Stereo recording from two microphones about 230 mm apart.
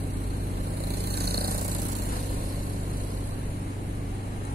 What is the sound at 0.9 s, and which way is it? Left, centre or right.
Vehicle, right.